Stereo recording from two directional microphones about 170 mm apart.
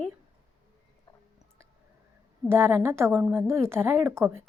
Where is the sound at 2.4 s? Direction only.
15° right (ahead or behind).